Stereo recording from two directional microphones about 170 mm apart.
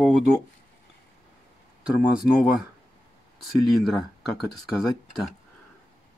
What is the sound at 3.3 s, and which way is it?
Speech, centre (ahead or behind).